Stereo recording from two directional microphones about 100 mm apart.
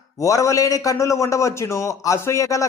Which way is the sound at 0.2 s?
30° left (ahead or behind).